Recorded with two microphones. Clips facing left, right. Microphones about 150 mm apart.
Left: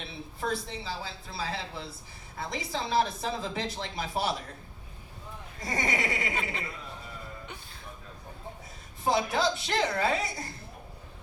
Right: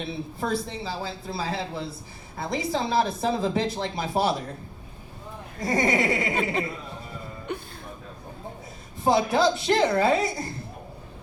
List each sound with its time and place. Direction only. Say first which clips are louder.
0.0 s speech: right 5 dB; 35° right (ahead or behind)
5.5 s speech: right 8 dB; 40° right (ahead or behind)
7.5 s music: right 13 dB; 55° right (ahead or behind)
9.0 s speech: right 6 dB; 35° right (ahead or behind)